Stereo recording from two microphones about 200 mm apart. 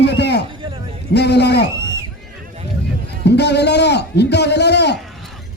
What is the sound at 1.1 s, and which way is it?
Speech, 55° left (ahead or behind).